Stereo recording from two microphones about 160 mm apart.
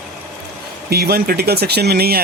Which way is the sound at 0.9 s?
80° right.